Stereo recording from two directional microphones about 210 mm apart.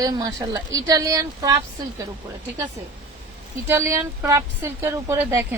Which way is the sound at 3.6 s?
10° right (ahead or behind).